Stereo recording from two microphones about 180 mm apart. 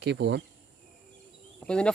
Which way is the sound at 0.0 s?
70° right (ahead or behind).